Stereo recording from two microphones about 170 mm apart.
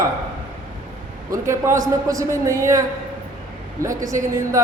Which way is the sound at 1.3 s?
15° right (ahead or behind).